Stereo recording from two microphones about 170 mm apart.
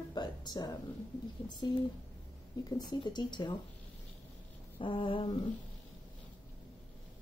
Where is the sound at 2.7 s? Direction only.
25° left (ahead or behind).